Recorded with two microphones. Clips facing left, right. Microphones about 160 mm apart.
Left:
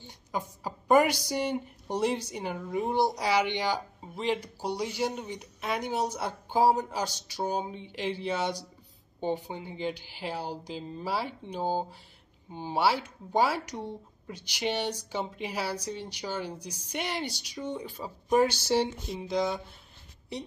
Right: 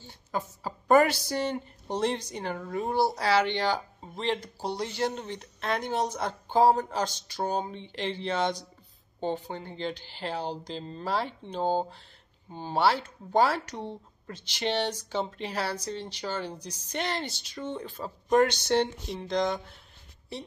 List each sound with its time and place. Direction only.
0.0 s a woman's voice: 15° left (ahead or behind)
20.3 s a woman's voice: 15° left (ahead or behind)